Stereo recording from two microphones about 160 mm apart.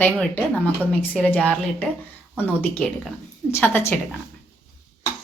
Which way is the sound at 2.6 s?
10° left (ahead or behind).